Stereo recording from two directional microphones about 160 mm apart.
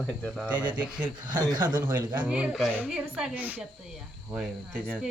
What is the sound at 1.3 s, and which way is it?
Speech, 25° right (ahead or behind).